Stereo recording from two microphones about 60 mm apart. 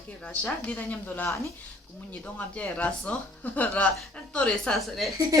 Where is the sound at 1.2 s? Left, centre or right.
Left.